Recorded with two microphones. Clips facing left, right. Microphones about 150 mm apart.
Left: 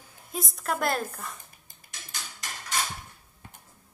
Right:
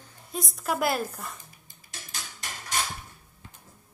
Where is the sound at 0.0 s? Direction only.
5° left (ahead or behind).